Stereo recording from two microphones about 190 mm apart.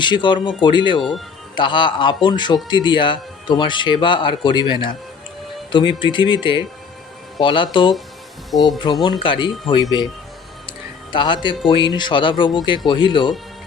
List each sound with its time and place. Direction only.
0.0 s speech: 25° left (ahead or behind)
6.0 s speech: 25° left (ahead or behind)
8.4 s speech: centre (ahead or behind)
9.0 s speech: 25° left (ahead or behind)
10.7 s music: 25° left (ahead or behind)
11.7 s speech: 25° left (ahead or behind)